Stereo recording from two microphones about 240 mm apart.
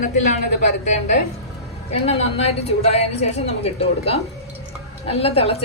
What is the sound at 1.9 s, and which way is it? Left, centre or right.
A woman's voice, left.